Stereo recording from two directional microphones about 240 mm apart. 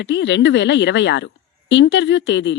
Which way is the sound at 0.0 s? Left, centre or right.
Left.